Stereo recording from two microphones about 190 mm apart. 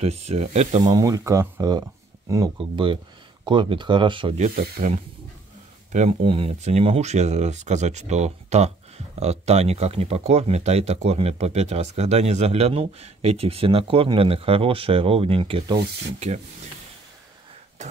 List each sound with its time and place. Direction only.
0.0 s speech: 35° right (ahead or behind)
0.8 s speech: 20° right (ahead or behind)
4.6 s speech: 50° right (ahead or behind)
5.9 s speech: 35° right (ahead or behind)